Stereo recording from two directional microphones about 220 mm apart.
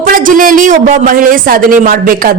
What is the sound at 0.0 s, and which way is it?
A man's voice, 40° right (ahead or behind).